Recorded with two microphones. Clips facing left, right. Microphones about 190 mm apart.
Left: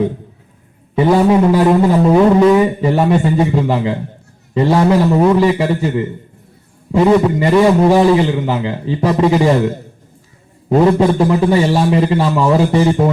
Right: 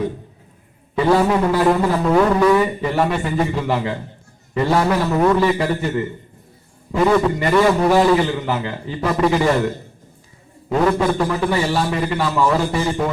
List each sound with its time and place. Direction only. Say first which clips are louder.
0.9 s a man's voice: left 5 dB; 20° left (ahead or behind)
10.7 s a man's voice: left 6 dB; 25° left (ahead or behind)